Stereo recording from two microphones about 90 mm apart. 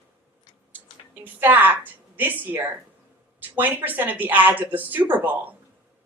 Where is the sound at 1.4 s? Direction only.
20° right (ahead or behind).